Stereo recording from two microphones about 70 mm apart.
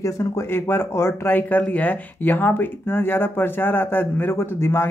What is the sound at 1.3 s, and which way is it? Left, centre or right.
Speech, left.